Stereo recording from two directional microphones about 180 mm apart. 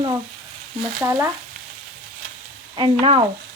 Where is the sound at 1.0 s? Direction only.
15° right (ahead or behind).